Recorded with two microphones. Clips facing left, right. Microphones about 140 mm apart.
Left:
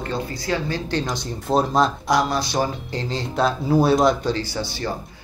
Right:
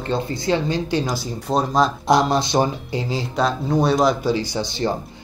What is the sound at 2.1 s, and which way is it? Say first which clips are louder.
Speech: right 4 dB; 25° right (ahead or behind).